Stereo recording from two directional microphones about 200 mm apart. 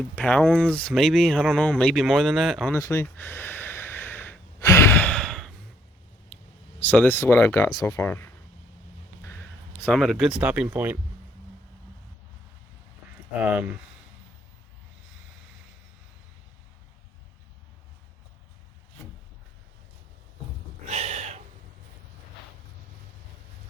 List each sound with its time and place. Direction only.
0.2 s speech: 5° left (ahead or behind)
2.7 s a sound: 15° left (ahead or behind)
6.3 s speech: 5° left (ahead or behind)
9.8 s speech: centre (ahead or behind)
13.4 s speech: 5° right (ahead or behind)
20.8 s a sound: 30° right (ahead or behind)